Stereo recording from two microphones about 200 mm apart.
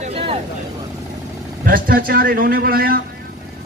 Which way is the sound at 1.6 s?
45° right (ahead or behind).